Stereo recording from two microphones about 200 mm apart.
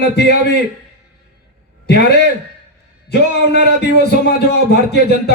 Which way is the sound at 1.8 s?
55° left (ahead or behind).